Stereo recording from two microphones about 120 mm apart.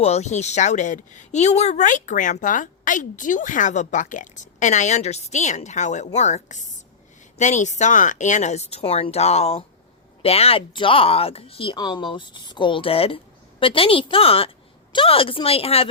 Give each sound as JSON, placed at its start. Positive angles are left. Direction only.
{"t": 0.0, "sound": "speech", "side_deg": 65}